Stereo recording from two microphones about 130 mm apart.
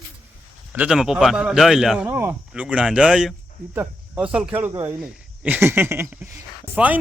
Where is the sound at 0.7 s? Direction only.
5° right (ahead or behind).